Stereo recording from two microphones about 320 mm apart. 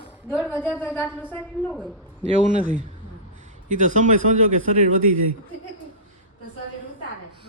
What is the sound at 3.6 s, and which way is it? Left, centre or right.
Speech, right.